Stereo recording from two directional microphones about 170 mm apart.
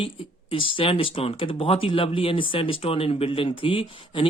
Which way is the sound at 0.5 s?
30° left (ahead or behind).